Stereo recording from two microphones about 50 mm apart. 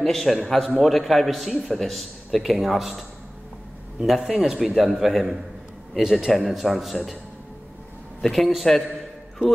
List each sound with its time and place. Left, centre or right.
0.0 s a man's voice: centre
8.2 s a man's voice: centre